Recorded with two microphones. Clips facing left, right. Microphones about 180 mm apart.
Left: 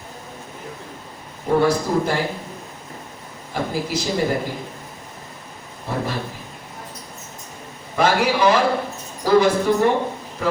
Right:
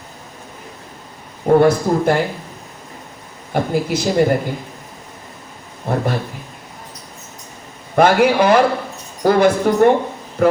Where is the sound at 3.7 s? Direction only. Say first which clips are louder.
Right 6 dB; 55° right (ahead or behind).